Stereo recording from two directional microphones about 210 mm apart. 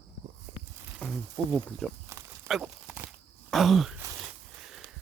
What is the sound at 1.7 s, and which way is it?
Speech, centre (ahead or behind).